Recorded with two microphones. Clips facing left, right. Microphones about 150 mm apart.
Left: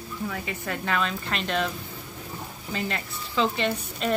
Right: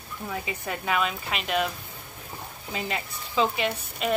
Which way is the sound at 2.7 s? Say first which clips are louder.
Left 1 dB; 15° right (ahead or behind).